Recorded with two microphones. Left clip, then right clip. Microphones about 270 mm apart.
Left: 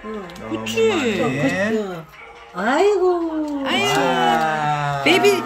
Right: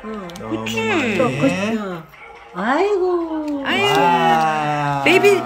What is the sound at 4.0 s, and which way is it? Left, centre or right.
Speech, right.